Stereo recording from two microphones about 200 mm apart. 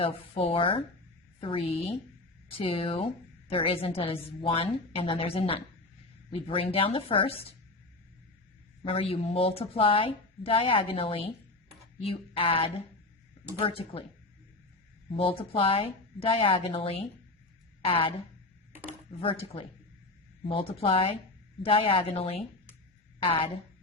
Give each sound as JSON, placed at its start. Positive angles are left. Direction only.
{"t": 0.0, "sound": "a woman's voice", "side_deg": 30}
{"t": 8.8, "sound": "a woman's voice", "side_deg": 30}
{"t": 15.1, "sound": "a woman's voice", "side_deg": 25}